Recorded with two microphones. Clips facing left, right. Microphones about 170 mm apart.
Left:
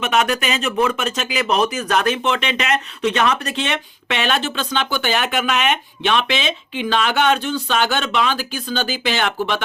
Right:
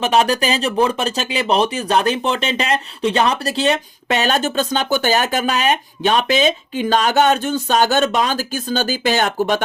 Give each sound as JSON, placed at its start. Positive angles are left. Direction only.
{"t": 0.0, "sound": "speech", "side_deg": -35}